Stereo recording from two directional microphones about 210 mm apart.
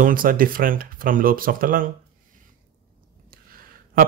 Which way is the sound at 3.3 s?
45° right (ahead or behind).